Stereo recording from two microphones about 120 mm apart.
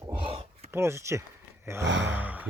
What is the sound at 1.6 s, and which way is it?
Gasp, 20° right (ahead or behind).